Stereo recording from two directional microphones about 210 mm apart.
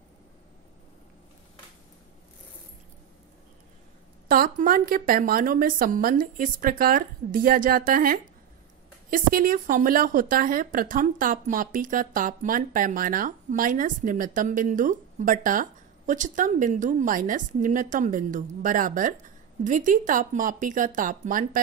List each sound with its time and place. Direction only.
4.3 s a woman's voice: 45° right (ahead or behind)